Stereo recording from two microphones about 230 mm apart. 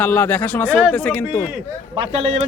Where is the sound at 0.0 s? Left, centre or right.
Centre.